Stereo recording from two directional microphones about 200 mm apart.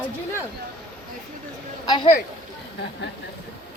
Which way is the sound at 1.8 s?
20° left (ahead or behind).